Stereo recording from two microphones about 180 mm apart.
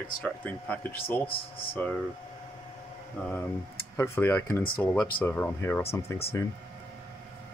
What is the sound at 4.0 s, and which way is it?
Speech, 15° left (ahead or behind).